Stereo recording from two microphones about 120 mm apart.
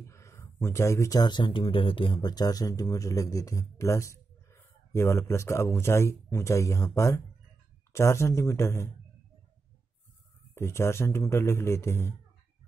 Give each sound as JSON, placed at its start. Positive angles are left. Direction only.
{"t": 0.0, "sound": "a man's voice", "side_deg": 25}
{"t": 10.5, "sound": "a man's voice", "side_deg": 20}